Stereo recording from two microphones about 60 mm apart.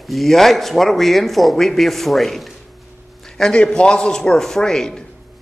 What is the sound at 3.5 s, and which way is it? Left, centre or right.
A man's voice, centre.